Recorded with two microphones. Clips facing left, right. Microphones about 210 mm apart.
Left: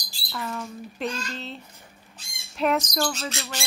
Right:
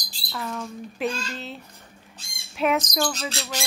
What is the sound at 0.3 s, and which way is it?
Speech, centre (ahead or behind).